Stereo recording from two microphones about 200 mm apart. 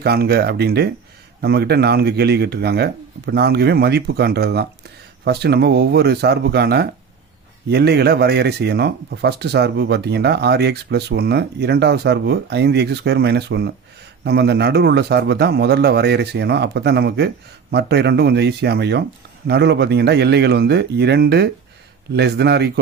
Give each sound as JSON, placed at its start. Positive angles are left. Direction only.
{"t": 0.0, "sound": "speech", "side_deg": -50}